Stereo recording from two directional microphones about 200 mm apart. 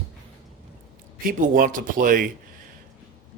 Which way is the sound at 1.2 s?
45° right (ahead or behind).